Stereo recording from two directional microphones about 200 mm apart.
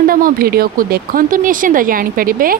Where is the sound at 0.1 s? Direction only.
45° right (ahead or behind).